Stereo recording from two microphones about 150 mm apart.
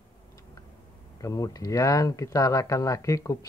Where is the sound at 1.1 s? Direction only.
25° left (ahead or behind).